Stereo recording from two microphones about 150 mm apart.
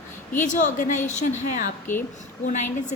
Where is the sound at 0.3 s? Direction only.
55° left (ahead or behind).